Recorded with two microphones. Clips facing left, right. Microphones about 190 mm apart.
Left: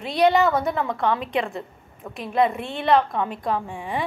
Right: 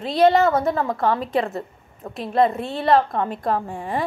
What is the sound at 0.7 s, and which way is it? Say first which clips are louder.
Speech: right 3 dB; 25° right (ahead or behind).